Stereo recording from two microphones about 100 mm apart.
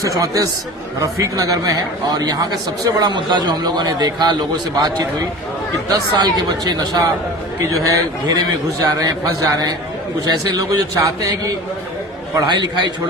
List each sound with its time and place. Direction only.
0.0 s a man's voice: 35° right (ahead or behind)